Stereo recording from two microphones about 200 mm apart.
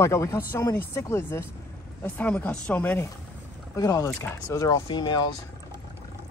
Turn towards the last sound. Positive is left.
turn(degrees=20)  # may be behind; listen again after turning